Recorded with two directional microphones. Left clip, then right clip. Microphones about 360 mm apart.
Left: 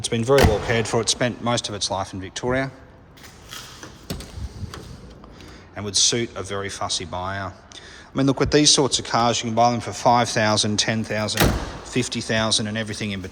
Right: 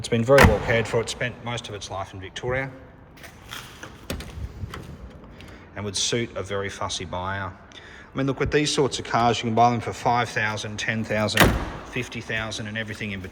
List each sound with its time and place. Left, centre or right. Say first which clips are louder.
0.0 s speech: right 1 dB; centre
5.7 s speech: left 5 dB; centre
11.9 s speech: left 6 dB; centre